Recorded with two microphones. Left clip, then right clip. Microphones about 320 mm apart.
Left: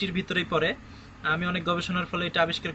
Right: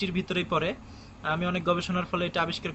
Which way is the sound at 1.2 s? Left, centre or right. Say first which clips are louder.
Left 2 dB; centre.